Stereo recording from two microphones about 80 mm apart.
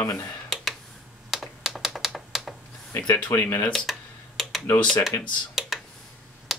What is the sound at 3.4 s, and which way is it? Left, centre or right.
Speech, left.